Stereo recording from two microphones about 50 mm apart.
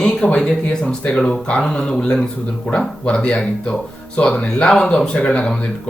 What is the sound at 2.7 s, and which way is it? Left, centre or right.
Speech, left.